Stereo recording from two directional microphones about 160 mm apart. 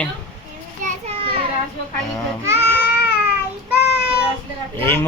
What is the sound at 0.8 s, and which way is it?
Children playing, 50° right (ahead or behind).